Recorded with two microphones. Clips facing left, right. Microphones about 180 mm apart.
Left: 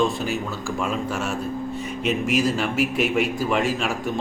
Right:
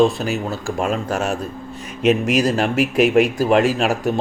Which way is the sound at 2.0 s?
90° right.